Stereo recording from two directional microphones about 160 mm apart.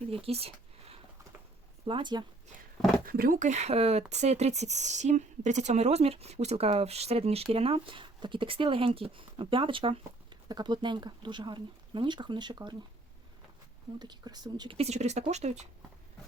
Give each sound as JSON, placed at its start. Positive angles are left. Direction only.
{"t": 0.1, "sound": "speech", "side_deg": -40}
{"t": 1.9, "sound": "speech", "side_deg": -30}
{"t": 3.1, "sound": "a woman's voice", "side_deg": -65}
{"t": 14.0, "sound": "a woman's voice", "side_deg": -25}